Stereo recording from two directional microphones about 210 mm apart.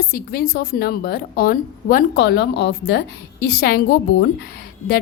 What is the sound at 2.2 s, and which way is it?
A woman's voice, 55° left (ahead or behind).